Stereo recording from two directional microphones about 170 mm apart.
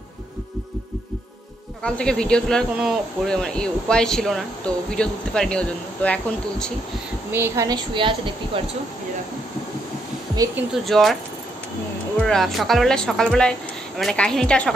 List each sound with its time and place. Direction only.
1.8 s speech: 5° left (ahead or behind)
7.2 s a woman's voice: 15° right (ahead or behind)
10.9 s speech: centre (ahead or behind)
12.2 s speech: 5° left (ahead or behind)